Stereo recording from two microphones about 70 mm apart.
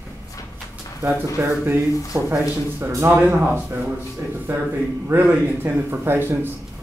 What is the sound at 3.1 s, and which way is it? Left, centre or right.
A man's voice, right.